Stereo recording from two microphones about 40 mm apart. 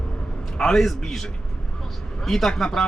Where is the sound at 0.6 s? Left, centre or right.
Centre.